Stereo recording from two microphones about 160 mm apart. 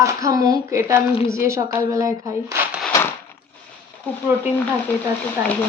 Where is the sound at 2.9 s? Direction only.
15° left (ahead or behind).